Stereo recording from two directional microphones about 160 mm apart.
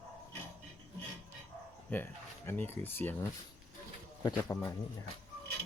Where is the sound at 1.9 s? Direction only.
15° left (ahead or behind).